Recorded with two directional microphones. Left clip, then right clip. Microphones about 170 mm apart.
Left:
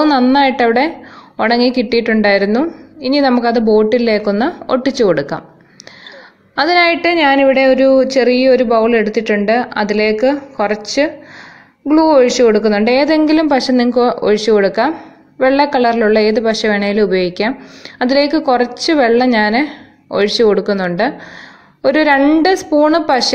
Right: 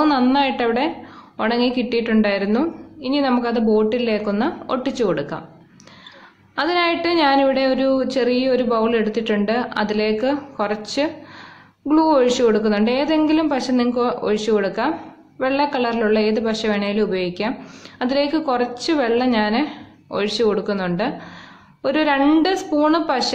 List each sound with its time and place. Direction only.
0.0 s a woman's voice: 30° left (ahead or behind)
6.5 s a woman's voice: 35° left (ahead or behind)
11.9 s a woman's voice: 25° left (ahead or behind)